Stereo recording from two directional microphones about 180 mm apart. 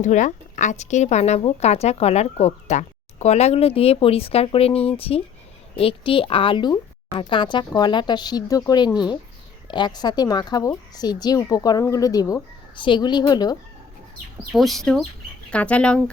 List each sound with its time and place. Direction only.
0.0 s speech: 45° left (ahead or behind); by 13.6 s 20° left (ahead or behind)
14.5 s speech: centre (ahead or behind)